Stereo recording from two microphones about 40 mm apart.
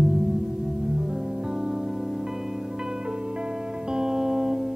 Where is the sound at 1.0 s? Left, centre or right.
Centre.